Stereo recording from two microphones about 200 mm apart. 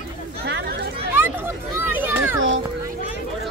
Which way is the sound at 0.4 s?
55° right (ahead or behind).